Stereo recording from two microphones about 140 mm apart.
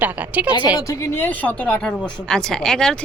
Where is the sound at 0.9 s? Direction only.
20° left (ahead or behind).